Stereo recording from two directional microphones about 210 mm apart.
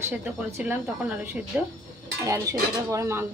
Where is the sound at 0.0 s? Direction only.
5° right (ahead or behind).